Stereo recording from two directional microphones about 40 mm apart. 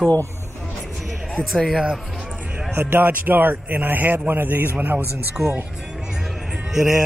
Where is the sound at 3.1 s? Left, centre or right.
Right.